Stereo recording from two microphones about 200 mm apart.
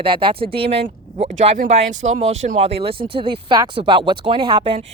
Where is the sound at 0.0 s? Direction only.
25° right (ahead or behind).